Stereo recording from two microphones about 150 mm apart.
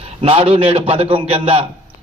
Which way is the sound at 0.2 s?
40° right (ahead or behind).